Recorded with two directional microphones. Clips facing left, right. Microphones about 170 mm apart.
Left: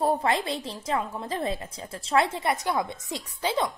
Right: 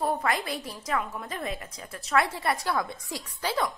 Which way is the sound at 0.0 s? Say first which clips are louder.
Left 3 dB; 25° left (ahead or behind).